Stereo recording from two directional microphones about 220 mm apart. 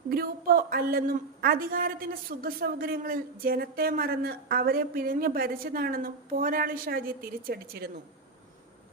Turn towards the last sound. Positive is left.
turn(degrees=-45)  # may be behind; listen again after turning